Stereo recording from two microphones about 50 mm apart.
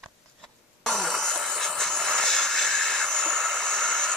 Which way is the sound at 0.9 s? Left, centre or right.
Centre.